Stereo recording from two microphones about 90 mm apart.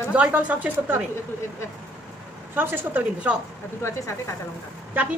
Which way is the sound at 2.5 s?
20° right (ahead or behind).